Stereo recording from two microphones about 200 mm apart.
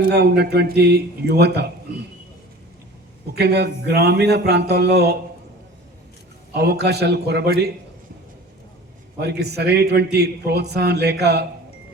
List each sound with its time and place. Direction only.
0.1 s a man's voice: 55° right (ahead or behind)
3.3 s a man's voice: 55° right (ahead or behind)
6.5 s a man's voice: 55° right (ahead or behind)
9.1 s a man's voice: 55° right (ahead or behind)